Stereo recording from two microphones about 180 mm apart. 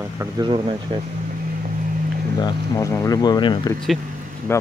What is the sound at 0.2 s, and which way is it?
Speech, 25° right (ahead or behind).